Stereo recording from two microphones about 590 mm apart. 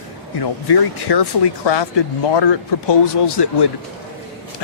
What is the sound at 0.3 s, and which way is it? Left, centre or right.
Speech, left.